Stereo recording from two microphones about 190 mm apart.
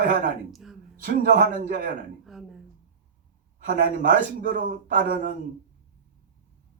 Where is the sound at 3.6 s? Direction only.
45° right (ahead or behind).